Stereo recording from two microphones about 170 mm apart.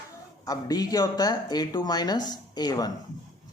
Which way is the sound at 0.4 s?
20° left (ahead or behind).